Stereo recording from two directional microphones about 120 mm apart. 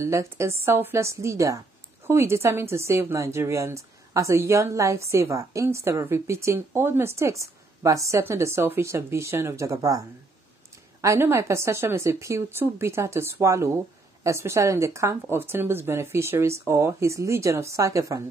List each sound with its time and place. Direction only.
0.0 s a woman's voice: 25° right (ahead or behind)